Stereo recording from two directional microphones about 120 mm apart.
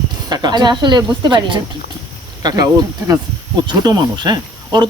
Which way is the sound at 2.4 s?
30° right (ahead or behind).